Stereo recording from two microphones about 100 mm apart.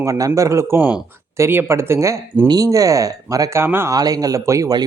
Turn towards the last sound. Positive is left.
turn(degrees=-30)  # may be behind; listen again after turning